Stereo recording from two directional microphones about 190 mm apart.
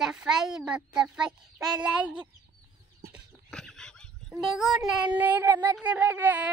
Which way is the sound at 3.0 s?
55° right (ahead or behind).